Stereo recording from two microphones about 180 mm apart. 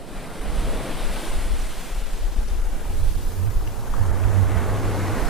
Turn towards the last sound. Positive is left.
turn(degrees=0)  # may be behind; listen again after turning